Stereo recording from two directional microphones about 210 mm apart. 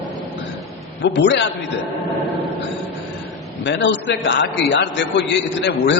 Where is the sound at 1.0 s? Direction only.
55° left (ahead or behind).